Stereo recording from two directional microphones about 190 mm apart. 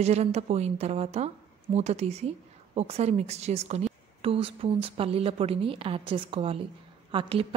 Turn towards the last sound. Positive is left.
turn(degrees=-25)  # may be behind; listen again after turning